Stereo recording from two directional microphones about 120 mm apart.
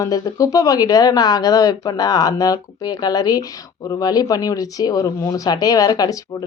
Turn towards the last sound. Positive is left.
turn(degrees=30)  # may be behind; listen again after turning